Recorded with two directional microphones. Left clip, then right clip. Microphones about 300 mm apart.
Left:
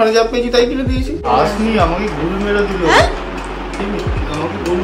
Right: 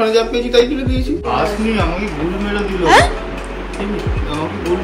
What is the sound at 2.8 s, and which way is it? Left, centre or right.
Speech, centre.